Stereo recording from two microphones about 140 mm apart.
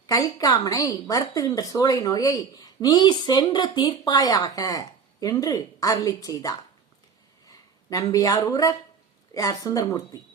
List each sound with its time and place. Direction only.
0.1 s a woman's voice: 25° left (ahead or behind)